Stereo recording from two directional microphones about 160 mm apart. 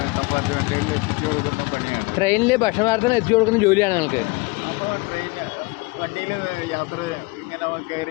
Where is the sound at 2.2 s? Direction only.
15° left (ahead or behind).